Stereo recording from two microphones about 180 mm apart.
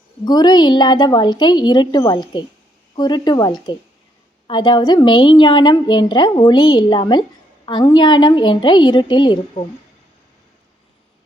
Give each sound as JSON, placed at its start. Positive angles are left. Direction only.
{"t": 0.3, "sound": "a woman's voice", "side_deg": 25}